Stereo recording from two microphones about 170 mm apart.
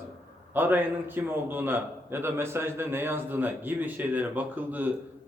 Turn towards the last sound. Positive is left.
turn(degrees=-10)  # may be behind; listen again after turning